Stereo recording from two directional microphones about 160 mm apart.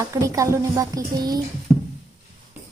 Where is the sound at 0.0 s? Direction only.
20° right (ahead or behind).